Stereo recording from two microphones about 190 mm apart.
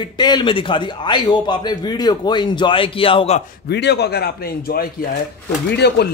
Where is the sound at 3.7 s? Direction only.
60° left (ahead or behind).